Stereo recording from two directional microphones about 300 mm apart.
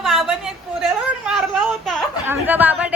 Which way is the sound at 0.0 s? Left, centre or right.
Centre.